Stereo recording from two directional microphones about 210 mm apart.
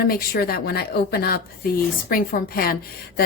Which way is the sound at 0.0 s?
45° left (ahead or behind).